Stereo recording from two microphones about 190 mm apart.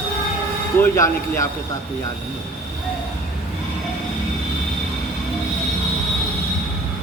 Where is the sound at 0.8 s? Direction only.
15° left (ahead or behind).